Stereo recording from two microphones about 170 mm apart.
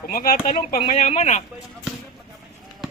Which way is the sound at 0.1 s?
60° left (ahead or behind).